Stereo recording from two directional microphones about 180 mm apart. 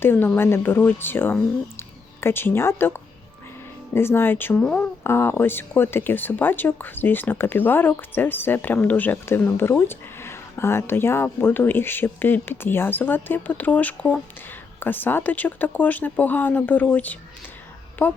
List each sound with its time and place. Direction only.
0.0 s speech: 10° left (ahead or behind)